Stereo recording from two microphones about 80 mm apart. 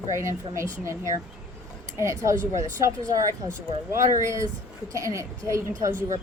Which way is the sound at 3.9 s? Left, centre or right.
Right.